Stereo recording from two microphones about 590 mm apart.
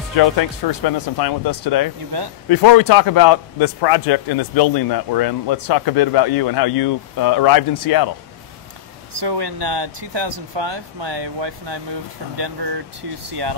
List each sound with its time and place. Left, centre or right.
0.2 s a man's voice: left
2.1 s speech: right
2.5 s a man's voice: left
9.2 s speech: right